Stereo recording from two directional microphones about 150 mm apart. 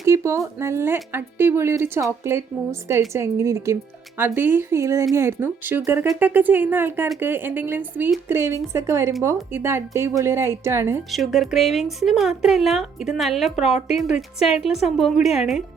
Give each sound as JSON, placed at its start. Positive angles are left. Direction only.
{"t": 0.0, "sound": "a woman's voice", "side_deg": -20}
{"t": 11.1, "sound": "a woman's voice", "side_deg": 0}